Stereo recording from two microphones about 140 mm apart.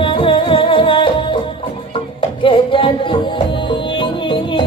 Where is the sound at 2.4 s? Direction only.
40° left (ahead or behind).